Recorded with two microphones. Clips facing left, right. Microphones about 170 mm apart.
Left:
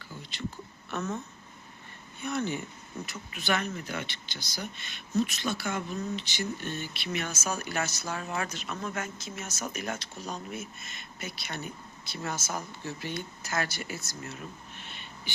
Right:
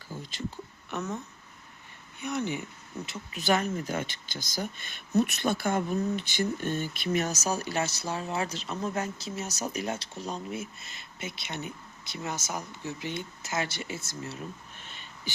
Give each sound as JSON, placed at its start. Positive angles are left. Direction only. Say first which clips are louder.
{"t": 0.1, "sound": "a sound", "louder": "right 4 dB", "side_deg": -45}
{"t": 0.9, "sound": "speech", "louder": "left 1 dB", "side_deg": -15}
{"t": 2.2, "sound": "speech", "louder": "even", "side_deg": -15}
{"t": 3.3, "sound": "speech", "louder": "right 4 dB", "side_deg": -40}
{"t": 5.1, "sound": "speech", "louder": "right 3 dB", "side_deg": -55}